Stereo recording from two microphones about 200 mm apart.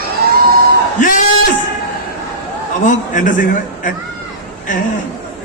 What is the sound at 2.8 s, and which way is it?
A man's voice, 40° left (ahead or behind).